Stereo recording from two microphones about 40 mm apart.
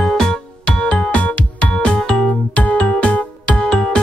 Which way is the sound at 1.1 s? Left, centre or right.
Left.